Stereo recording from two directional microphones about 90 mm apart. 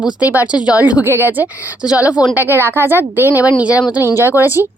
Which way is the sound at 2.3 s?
25° right (ahead or behind).